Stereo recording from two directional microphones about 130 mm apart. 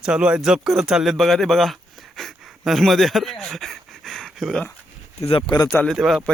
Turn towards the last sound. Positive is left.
turn(degrees=0)  # may be behind; listen again after turning